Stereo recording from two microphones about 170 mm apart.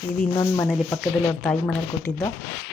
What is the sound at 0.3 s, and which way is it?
Speech, 15° left (ahead or behind).